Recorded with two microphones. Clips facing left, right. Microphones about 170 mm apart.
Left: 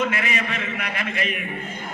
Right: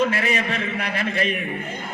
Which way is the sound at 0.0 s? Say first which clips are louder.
Right 3 dB; 35° right (ahead or behind).